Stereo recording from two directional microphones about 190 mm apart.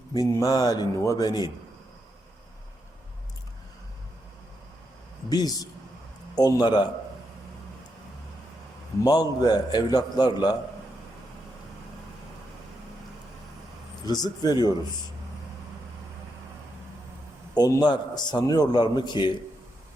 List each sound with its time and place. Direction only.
0.1 s a man's voice: 15° left (ahead or behind)
5.3 s a man's voice: 20° left (ahead or behind)
9.0 s a man's voice: 20° left (ahead or behind)
14.0 s a man's voice: 20° left (ahead or behind)
17.5 s a man's voice: 20° left (ahead or behind)